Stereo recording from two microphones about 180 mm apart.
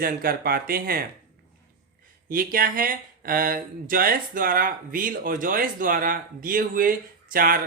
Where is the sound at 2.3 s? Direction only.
50° right (ahead or behind).